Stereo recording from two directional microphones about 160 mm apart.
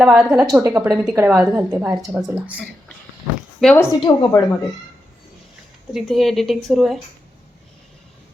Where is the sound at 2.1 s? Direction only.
10° right (ahead or behind).